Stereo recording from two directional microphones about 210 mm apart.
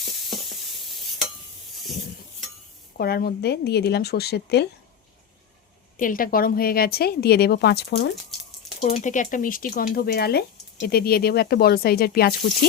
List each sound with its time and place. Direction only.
3.0 s speech: 45° left (ahead or behind)
6.0 s speech: 40° left (ahead or behind)
8.8 s speech: 40° left (ahead or behind)